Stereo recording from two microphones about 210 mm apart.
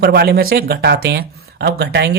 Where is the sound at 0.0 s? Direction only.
50° right (ahead or behind).